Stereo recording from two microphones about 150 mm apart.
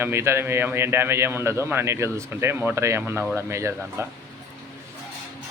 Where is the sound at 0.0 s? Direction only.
15° right (ahead or behind).